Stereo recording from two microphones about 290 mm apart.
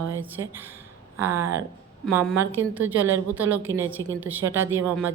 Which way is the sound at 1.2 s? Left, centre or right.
Centre.